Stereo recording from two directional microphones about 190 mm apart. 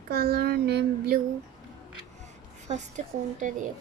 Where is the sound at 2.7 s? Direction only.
35° right (ahead or behind).